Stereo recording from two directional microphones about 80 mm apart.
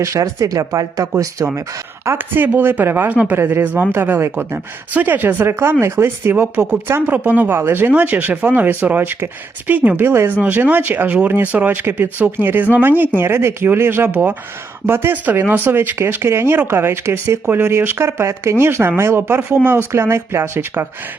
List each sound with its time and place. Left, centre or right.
0.0 s speech: right